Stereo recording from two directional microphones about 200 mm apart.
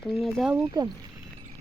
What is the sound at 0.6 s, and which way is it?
Speech, 15° right (ahead or behind).